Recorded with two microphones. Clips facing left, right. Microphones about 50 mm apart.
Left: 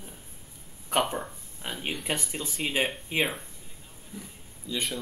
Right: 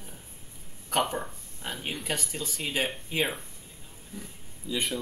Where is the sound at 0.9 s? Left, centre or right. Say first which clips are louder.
Left 1 dB; centre.